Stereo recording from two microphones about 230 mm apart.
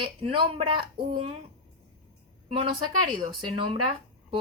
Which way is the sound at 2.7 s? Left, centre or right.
Right.